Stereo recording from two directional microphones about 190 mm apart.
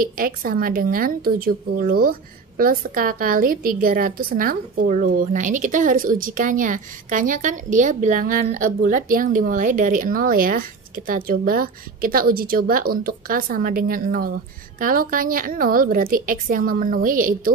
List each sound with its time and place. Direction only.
0.0 s a woman's voice: 50° right (ahead or behind)